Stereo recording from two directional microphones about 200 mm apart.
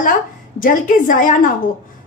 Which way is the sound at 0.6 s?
40° left (ahead or behind).